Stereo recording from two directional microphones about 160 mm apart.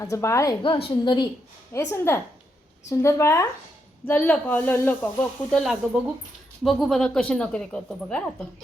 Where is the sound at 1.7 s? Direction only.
15° left (ahead or behind).